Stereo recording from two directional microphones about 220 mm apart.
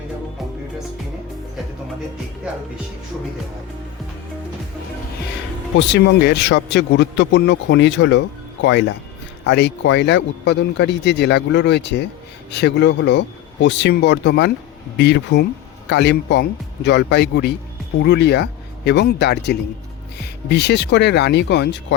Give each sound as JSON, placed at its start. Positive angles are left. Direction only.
{"t": 5.8, "sound": "speech", "side_deg": 55}